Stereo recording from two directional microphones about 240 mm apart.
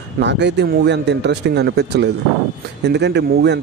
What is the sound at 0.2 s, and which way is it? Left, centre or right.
Speech, right.